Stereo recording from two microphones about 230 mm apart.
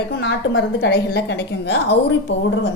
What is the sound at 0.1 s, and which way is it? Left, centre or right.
A woman's voice, left.